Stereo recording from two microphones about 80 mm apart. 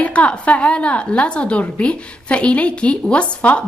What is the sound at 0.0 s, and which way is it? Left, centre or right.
A woman's voice, centre.